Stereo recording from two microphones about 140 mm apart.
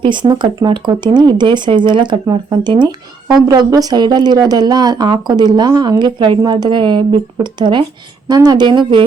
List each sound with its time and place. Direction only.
0.0 s a woman's voice: 35° right (ahead or behind)